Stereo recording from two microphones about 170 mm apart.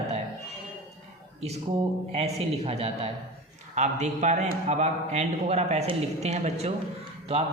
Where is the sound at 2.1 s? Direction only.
35° right (ahead or behind).